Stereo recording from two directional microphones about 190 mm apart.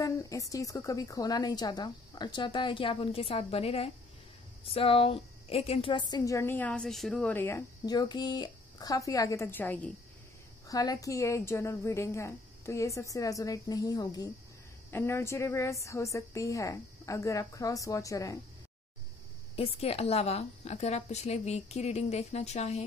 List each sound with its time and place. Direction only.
0.0 s a woman's voice: 15° left (ahead or behind)
19.5 s a woman's voice: 30° left (ahead or behind)